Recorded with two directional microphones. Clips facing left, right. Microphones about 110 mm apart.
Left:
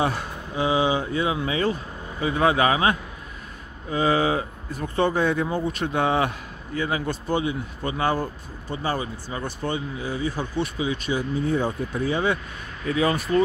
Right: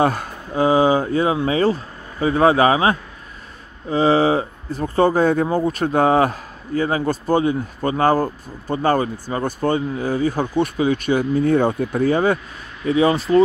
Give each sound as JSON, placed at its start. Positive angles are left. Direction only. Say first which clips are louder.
{"t": 0.0, "sound": "speech", "louder": "right 6 dB", "side_deg": -50}
{"t": 12.8, "sound": "speech", "louder": "right 6 dB", "side_deg": -25}